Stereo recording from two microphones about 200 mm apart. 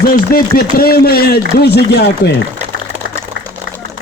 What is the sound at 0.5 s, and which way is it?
Speech, 50° left (ahead or behind).